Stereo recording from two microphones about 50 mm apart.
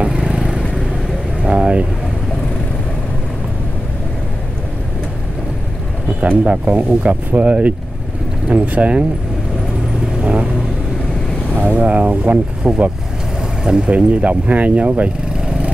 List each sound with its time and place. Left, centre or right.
0.0 s vehicle: centre
1.4 s a sound: right
6.2 s speech: right
10.2 s speech: right
11.5 s speech: right